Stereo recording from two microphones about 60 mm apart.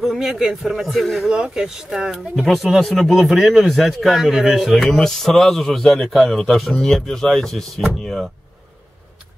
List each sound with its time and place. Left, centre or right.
0.0 s a man's voice: centre
4.9 s a man's voice: centre